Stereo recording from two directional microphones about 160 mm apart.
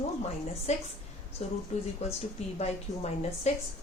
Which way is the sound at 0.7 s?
45° left (ahead or behind).